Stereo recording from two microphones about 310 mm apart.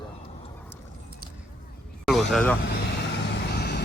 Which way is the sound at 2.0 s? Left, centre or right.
Centre.